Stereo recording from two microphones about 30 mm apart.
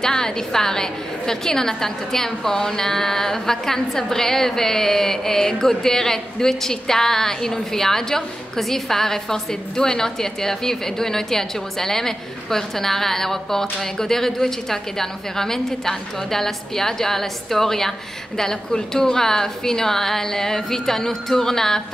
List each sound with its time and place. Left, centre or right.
0.0 s a woman's voice: left